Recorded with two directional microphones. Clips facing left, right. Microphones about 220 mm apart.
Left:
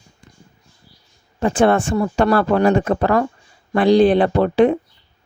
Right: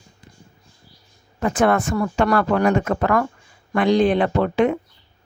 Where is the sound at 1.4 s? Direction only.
30° left (ahead or behind).